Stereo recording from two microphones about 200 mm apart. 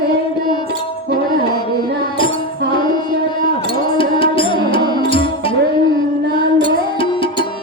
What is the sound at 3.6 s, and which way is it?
Music, 25° left (ahead or behind).